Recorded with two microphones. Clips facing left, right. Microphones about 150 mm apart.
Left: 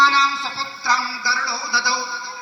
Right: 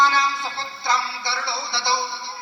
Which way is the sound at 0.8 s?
25° right (ahead or behind).